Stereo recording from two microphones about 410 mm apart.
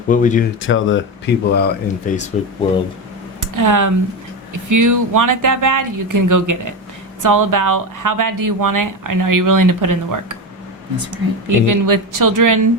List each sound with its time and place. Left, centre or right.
0.1 s speech: centre
3.4 s speech: right
11.4 s speech: right